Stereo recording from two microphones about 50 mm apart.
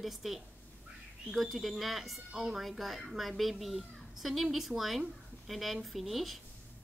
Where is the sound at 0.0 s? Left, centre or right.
Centre.